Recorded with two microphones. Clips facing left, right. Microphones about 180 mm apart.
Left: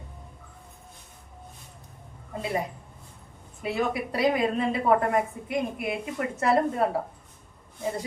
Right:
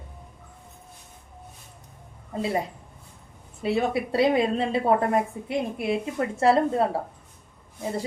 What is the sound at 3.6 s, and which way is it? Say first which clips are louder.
A woman's voice: right 3 dB; 30° right (ahead or behind).